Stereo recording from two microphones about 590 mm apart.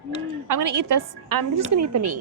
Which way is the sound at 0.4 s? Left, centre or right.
Right.